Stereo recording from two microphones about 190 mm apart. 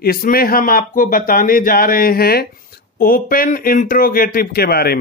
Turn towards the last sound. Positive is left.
turn(degrees=55)  # may be behind; listen again after turning